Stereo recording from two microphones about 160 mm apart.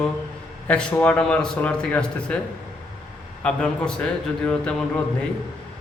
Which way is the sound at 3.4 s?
5° left (ahead or behind).